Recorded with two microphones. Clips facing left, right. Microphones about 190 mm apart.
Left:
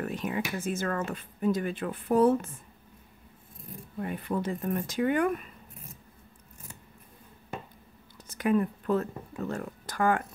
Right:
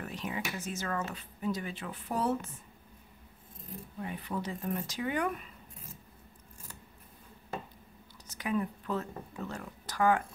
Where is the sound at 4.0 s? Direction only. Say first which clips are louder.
Left 6 dB; 50° left (ahead or behind).